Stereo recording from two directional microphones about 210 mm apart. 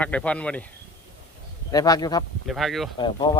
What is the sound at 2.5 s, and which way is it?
Speech, centre (ahead or behind).